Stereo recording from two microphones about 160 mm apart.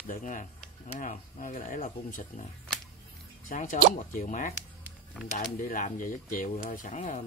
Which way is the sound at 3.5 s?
55° left (ahead or behind).